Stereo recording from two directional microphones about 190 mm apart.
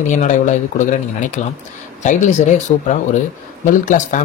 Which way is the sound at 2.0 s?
40° left (ahead or behind).